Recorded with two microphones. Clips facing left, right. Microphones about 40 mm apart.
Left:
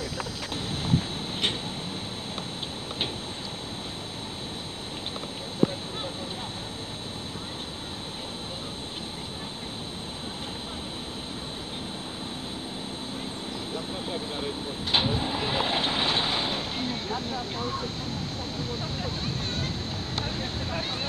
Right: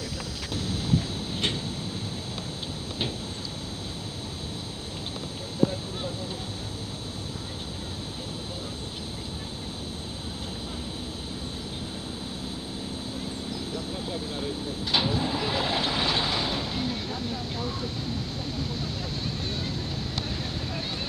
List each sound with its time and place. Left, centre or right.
0.0 s vehicle: left
13.9 s vehicle: left
20.3 s a sound: left